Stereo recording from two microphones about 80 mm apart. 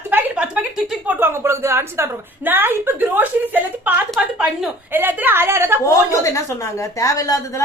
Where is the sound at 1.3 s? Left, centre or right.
Right; by 4.7 s centre.